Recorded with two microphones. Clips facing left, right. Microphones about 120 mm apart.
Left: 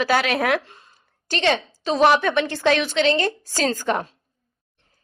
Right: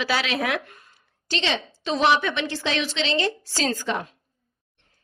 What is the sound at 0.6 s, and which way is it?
Speech, 30° left (ahead or behind).